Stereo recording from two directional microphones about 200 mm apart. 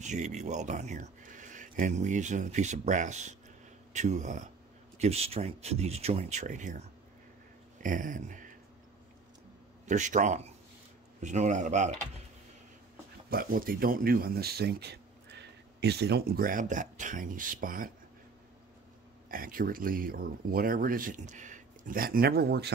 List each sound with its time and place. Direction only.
0.0 s speech: 35° right (ahead or behind)
7.8 s speech: 40° right (ahead or behind)
9.8 s speech: 40° right (ahead or behind)
13.3 s speech: 45° right (ahead or behind)
19.3 s speech: 45° right (ahead or behind)